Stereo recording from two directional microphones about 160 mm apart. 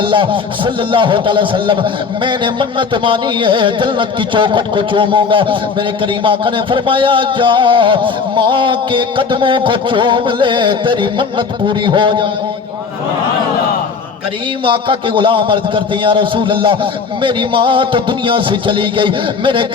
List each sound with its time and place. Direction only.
0.0 s music: 30° right (ahead or behind)
14.6 s music: 30° right (ahead or behind)